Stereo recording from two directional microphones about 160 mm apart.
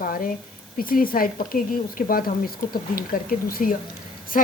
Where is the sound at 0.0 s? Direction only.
60° left (ahead or behind).